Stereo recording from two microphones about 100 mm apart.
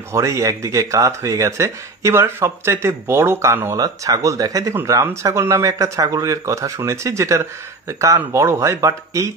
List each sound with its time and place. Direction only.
0.1 s speech: 30° right (ahead or behind)